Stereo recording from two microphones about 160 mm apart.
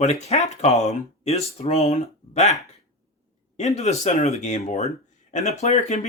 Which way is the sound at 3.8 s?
45° left (ahead or behind).